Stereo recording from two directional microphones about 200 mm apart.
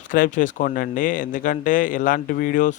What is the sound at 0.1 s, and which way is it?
Speech, 40° left (ahead or behind).